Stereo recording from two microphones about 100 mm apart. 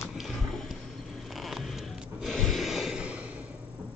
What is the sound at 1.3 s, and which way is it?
Snort, centre (ahead or behind).